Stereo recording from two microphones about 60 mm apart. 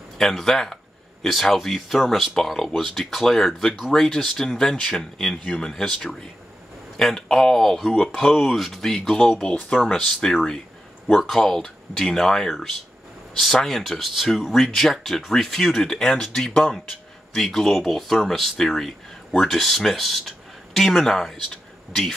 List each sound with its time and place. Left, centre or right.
0.2 s speech: centre
3.9 s speech: centre
11.1 s speech: centre